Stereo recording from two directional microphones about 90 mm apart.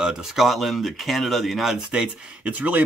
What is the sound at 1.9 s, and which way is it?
Speech, 15° right (ahead or behind).